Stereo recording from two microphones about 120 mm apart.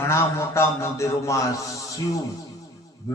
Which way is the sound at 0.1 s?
20° left (ahead or behind).